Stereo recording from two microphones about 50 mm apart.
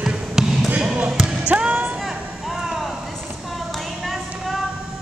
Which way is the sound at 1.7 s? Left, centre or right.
Right.